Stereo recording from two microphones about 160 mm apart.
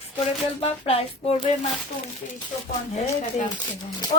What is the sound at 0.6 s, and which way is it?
Speech, 40° left (ahead or behind).